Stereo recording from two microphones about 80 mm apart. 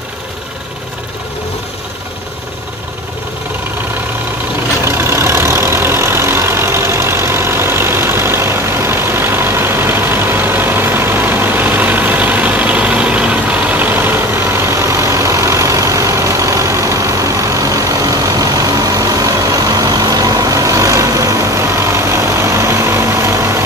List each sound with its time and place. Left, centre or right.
4.8 s vehicle: right